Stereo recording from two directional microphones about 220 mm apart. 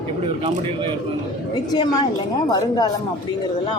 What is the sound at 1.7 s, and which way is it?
Speech, 15° left (ahead or behind).